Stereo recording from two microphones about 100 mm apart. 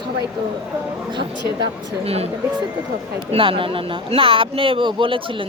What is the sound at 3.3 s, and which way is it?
Speech, 65° right (ahead or behind).